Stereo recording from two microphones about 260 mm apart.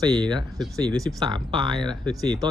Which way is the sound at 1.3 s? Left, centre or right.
Centre.